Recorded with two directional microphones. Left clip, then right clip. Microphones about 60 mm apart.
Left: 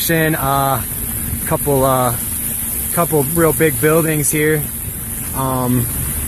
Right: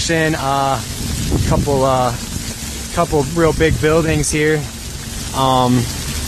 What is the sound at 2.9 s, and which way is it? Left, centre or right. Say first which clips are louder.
Speech: even; left.